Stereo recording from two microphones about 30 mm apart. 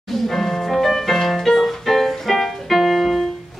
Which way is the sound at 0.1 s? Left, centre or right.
Centre.